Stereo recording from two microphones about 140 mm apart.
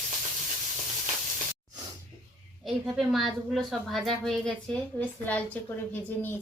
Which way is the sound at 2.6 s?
Centre (ahead or behind).